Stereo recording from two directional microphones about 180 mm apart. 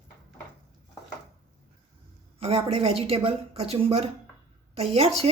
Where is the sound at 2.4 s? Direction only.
35° right (ahead or behind).